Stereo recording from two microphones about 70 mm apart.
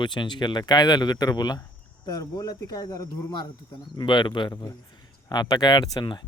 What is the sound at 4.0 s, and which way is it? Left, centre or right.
Speech, left.